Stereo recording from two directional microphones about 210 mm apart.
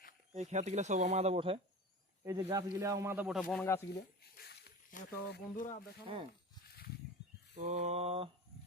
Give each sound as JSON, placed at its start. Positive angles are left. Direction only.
{"t": 0.3, "sound": "speech", "side_deg": -35}
{"t": 3.5, "sound": "speech", "side_deg": 10}
{"t": 4.4, "sound": "speech", "side_deg": 45}
{"t": 7.5, "sound": "speech", "side_deg": -35}